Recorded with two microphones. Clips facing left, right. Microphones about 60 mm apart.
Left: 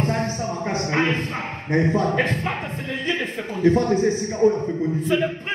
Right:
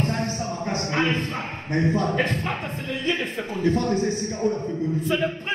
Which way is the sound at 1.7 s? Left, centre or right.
Left.